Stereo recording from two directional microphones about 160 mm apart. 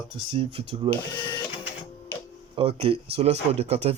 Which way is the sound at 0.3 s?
35° right (ahead or behind).